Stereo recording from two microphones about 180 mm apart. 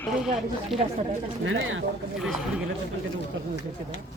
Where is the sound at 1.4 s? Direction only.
90° right.